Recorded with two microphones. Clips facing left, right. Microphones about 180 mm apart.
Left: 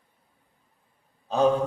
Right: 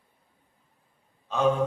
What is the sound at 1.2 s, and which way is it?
Speech, 35° left (ahead or behind).